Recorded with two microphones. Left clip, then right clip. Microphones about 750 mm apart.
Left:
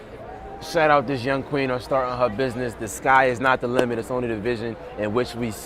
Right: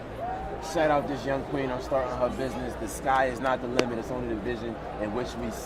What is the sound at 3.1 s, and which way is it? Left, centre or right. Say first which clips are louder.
Speech: left 7 dB; left.